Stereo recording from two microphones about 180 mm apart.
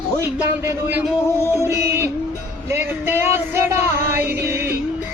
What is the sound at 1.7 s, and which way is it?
Music, 15° right (ahead or behind).